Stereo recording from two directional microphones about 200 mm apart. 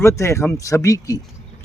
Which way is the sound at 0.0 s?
15° left (ahead or behind).